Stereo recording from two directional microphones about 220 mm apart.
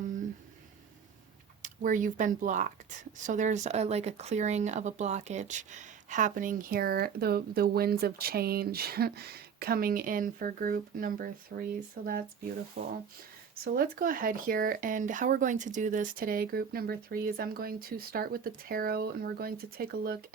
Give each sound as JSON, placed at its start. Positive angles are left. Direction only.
{"t": 1.6, "sound": "speech", "side_deg": -35}
{"t": 12.8, "sound": "speech", "side_deg": -40}